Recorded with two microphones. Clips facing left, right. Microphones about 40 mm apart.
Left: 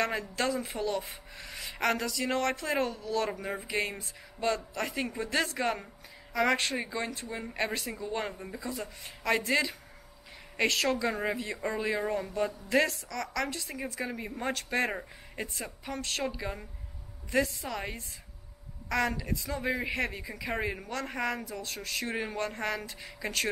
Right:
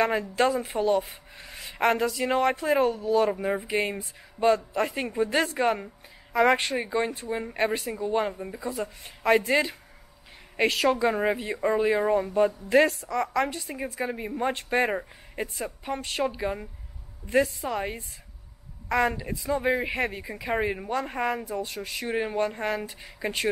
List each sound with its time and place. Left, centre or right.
0.4 s speech: right; by 8.5 s centre
8.5 s speech: right
10.6 s speech: centre
12.6 s speech: right
14.5 s speech: right
21.7 s speech: centre